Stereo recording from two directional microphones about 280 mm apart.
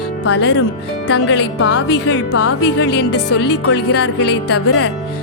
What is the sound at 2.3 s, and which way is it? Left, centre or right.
Speech, left.